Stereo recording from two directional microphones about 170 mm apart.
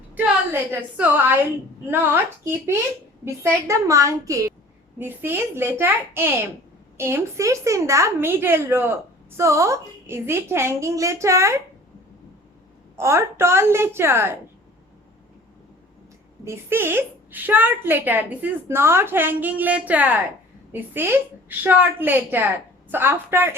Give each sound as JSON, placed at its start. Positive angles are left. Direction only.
{"t": 0.2, "sound": "a woman's voice", "side_deg": -10}
{"t": 13.0, "sound": "a woman's voice", "side_deg": -15}
{"t": 16.4, "sound": "a woman's voice", "side_deg": -15}